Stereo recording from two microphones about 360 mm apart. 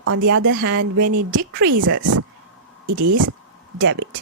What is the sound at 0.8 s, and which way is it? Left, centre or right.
Speech, right.